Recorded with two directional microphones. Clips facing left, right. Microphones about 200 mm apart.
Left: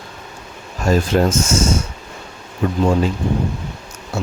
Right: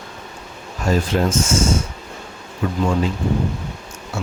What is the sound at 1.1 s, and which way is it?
Speech, 50° left (ahead or behind).